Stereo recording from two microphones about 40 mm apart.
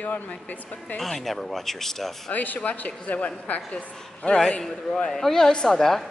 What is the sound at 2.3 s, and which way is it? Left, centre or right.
A woman's voice, left.